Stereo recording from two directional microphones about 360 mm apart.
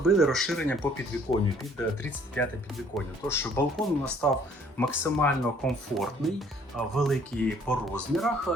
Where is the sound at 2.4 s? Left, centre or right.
Centre.